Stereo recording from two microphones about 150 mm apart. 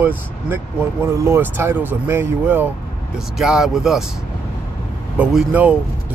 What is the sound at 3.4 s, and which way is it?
Speech, 5° right (ahead or behind).